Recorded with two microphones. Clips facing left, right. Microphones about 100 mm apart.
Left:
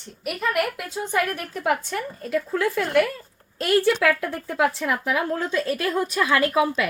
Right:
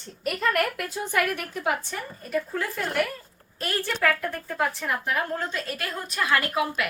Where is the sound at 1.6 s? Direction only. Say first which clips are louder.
Left 5 dB; 80° left.